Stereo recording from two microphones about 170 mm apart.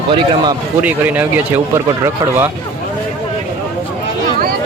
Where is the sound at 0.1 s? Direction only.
30° right (ahead or behind).